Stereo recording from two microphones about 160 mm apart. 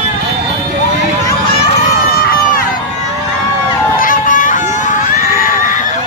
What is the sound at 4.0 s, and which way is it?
Crowd, 55° left (ahead or behind).